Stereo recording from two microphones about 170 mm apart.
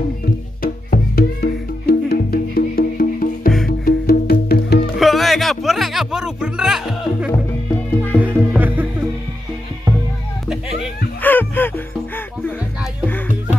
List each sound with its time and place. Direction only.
0.6 s music: 55° left (ahead or behind)
4.9 s music: centre (ahead or behind)
11.2 s music: 10° left (ahead or behind)